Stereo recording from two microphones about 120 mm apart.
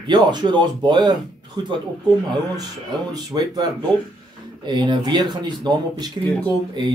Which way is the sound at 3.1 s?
35° right (ahead or behind).